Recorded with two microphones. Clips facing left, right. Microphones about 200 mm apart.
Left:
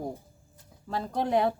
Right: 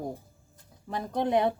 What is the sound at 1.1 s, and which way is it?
Speech, 20° right (ahead or behind).